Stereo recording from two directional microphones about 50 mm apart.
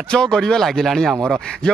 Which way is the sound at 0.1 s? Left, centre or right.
Centre.